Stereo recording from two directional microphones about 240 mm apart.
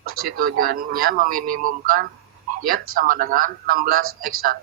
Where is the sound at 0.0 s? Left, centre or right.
Right.